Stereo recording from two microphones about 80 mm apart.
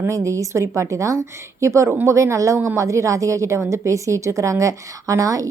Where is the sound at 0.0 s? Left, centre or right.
Right.